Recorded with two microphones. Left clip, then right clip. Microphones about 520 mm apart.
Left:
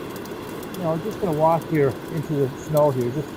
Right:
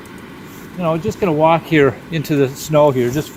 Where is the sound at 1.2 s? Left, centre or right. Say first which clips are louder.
Right 6 dB; centre.